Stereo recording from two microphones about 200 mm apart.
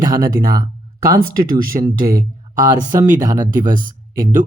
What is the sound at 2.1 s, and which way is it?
Speech, 20° right (ahead or behind).